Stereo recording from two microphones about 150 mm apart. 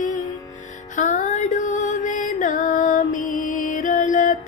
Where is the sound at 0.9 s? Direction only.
55° left (ahead or behind).